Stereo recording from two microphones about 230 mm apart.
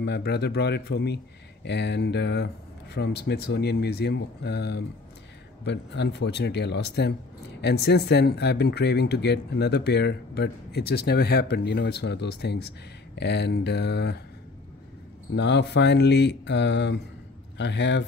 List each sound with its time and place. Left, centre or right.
0.0 s speech: left
15.3 s speech: left